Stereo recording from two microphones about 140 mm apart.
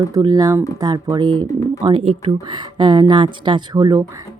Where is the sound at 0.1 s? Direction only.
30° right (ahead or behind).